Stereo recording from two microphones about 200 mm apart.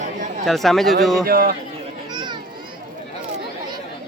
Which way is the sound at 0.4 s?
Centre (ahead or behind).